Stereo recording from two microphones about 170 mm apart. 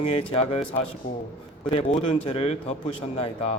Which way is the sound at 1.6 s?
40° left (ahead or behind).